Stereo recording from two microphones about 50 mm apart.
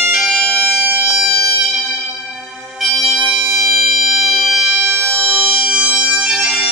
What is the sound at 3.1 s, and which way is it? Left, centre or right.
Bagpipes, centre.